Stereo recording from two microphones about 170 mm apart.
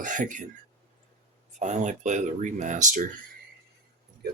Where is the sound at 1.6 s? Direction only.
45° right (ahead or behind).